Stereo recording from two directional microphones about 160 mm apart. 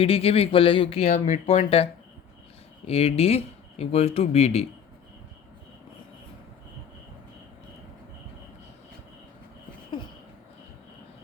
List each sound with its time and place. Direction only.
0.0 s speech: 35° left (ahead or behind)